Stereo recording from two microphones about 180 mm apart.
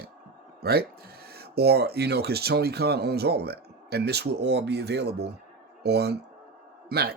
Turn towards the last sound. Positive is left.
turn(degrees=-60)  # may be behind; listen again after turning